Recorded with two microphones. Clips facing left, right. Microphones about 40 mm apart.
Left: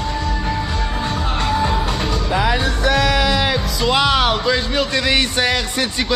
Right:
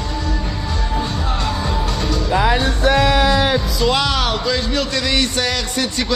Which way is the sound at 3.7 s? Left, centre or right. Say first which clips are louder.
Left 2 dB; centre.